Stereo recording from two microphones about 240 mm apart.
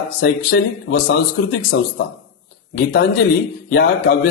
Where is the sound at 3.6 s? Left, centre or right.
Left.